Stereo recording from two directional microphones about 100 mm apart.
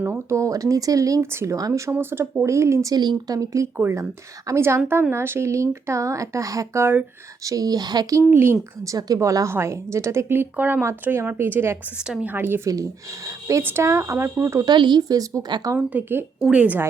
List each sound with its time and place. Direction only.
0.0 s a woman's voice: 25° right (ahead or behind)
2.9 s a woman's voice: 45° right (ahead or behind); by 7.0 s 25° right (ahead or behind)
7.4 s speech: 40° right (ahead or behind)
8.3 s a woman's voice: 25° right (ahead or behind)
8.9 s a woman's voice: 35° right (ahead or behind)
12.6 s a woman's voice: 35° right (ahead or behind)
14.6 s speech: 50° right (ahead or behind)
15.9 s a woman's voice: 20° right (ahead or behind)